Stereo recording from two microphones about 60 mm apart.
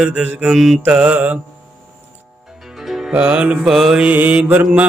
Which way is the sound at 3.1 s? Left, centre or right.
Right.